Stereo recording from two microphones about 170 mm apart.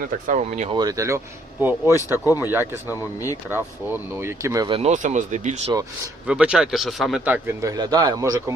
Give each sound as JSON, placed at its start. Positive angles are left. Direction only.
{"t": 0.0, "sound": "speech", "side_deg": -45}
{"t": 0.7, "sound": "a man's voice", "side_deg": -25}
{"t": 2.1, "sound": "speech", "side_deg": 20}
{"t": 2.5, "sound": "speech", "side_deg": -15}
{"t": 2.9, "sound": "speech", "side_deg": 20}
{"t": 3.5, "sound": "speech", "side_deg": -10}
{"t": 4.8, "sound": "speech", "side_deg": -45}
{"t": 6.2, "sound": "speech", "side_deg": -5}
{"t": 7.6, "sound": "a man's voice", "side_deg": -20}